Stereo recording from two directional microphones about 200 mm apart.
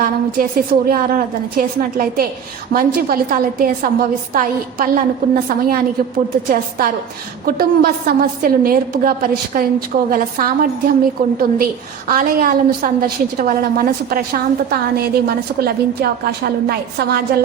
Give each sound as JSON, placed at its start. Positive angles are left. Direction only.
{"t": 0.0, "sound": "a woman's voice", "side_deg": -45}